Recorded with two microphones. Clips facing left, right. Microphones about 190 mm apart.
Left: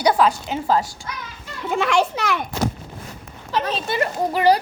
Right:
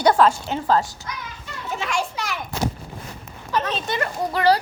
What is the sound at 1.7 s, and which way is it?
Speech, 70° left (ahead or behind).